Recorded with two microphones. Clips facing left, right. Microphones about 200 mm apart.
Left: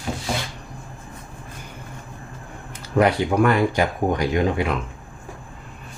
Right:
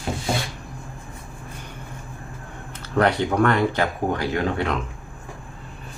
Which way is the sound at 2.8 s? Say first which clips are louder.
Left 2 dB; 10° left (ahead or behind).